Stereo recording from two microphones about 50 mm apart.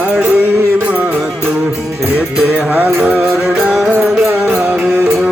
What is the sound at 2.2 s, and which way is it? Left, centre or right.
Music, centre.